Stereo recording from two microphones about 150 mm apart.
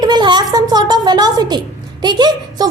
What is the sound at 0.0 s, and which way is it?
A woman's voice, 30° right (ahead or behind).